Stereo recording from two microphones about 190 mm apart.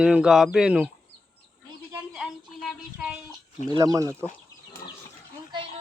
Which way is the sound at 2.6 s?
Centre (ahead or behind).